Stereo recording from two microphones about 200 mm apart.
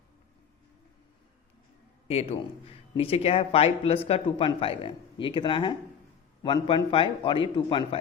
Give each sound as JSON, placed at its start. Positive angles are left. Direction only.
{"t": 2.0, "sound": "a man's voice", "side_deg": 30}